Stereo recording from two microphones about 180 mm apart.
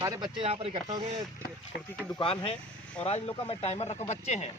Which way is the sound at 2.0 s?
25° left (ahead or behind).